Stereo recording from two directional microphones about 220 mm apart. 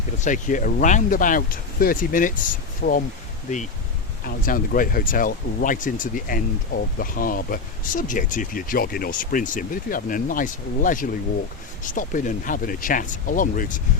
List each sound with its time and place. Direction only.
0.2 s speech: 35° left (ahead or behind)
4.4 s speech: 40° left (ahead or behind)